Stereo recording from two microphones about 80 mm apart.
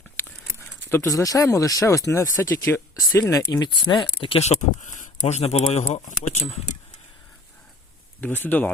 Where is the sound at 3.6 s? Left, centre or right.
Left.